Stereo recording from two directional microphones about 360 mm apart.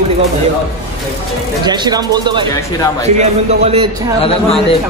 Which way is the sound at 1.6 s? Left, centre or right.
Centre.